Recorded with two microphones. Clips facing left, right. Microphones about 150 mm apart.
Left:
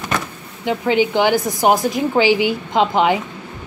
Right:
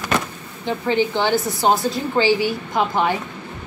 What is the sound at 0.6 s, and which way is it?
A woman's voice, 15° left (ahead or behind).